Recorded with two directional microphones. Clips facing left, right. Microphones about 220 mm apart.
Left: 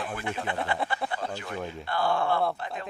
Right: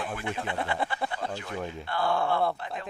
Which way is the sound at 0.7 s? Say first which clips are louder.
Even; centre (ahead or behind).